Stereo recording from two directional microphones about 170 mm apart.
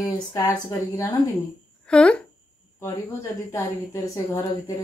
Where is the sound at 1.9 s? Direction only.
5° left (ahead or behind).